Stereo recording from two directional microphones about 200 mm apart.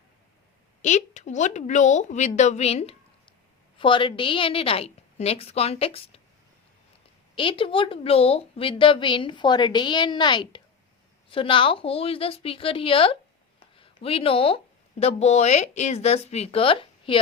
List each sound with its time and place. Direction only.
0.8 s a woman's voice: 35° left (ahead or behind)
7.3 s a woman's voice: 25° left (ahead or behind)